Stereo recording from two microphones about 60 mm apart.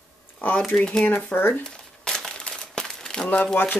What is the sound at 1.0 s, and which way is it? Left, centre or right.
Speech, left.